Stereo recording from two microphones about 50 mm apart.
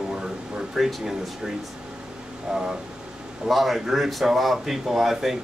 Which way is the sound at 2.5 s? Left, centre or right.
Centre.